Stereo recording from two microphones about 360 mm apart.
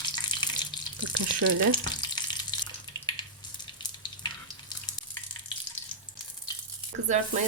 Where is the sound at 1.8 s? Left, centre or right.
Centre.